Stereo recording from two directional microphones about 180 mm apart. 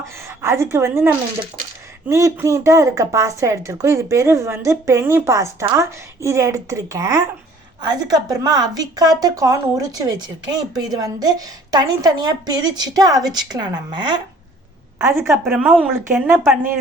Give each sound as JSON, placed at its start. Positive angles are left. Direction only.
{"t": 0.0, "sound": "a woman's voice", "side_deg": -15}
{"t": 14.9, "sound": "a woman's voice", "side_deg": -15}